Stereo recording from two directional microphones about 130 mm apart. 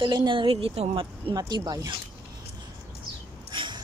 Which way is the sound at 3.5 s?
40° right (ahead or behind).